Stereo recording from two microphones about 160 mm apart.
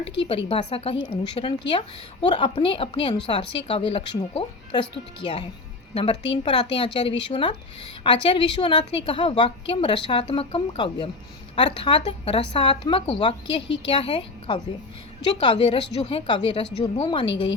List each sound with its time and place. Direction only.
0.0 s a woman's voice: 35° left (ahead or behind)